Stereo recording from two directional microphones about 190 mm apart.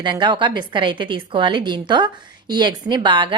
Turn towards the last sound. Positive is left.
turn(degrees=-25)  # may be behind; listen again after turning